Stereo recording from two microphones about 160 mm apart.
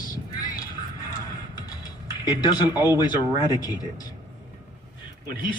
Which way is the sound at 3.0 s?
25° left (ahead or behind).